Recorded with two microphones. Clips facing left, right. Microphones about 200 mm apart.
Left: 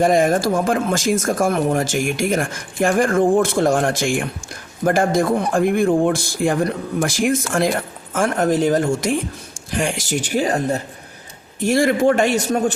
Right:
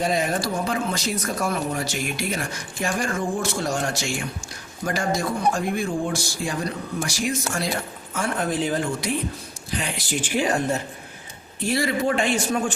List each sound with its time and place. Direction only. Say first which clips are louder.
0.0 s a man's voice: left 8 dB; 50° left (ahead or behind)
11.6 s a man's voice: left 7 dB; 50° left (ahead or behind)